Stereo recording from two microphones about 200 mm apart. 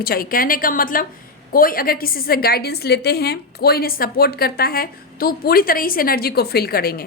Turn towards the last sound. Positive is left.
turn(degrees=50)  # may be behind; listen again after turning